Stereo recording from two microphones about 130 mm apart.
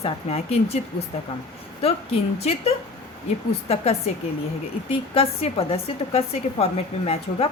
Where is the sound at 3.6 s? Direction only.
55° left (ahead or behind).